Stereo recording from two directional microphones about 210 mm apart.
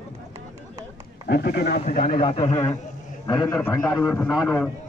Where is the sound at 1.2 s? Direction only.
50° left (ahead or behind).